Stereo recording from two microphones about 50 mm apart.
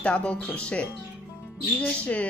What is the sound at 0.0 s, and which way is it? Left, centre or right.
Speech, left.